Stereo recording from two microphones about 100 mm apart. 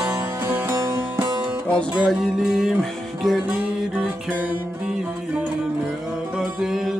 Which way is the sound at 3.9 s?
15° right (ahead or behind).